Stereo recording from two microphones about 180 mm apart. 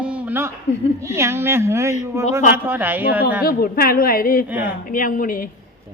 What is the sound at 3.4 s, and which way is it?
A woman's voice, 55° left (ahead or behind).